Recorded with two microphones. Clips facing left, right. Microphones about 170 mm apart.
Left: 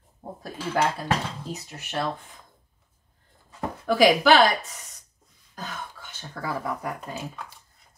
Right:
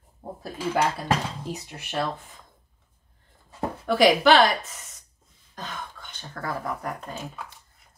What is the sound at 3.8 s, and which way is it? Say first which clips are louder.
Speech: even; centre (ahead or behind).